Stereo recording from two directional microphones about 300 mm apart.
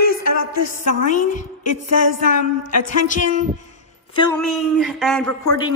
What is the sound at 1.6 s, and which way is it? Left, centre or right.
Speech, left.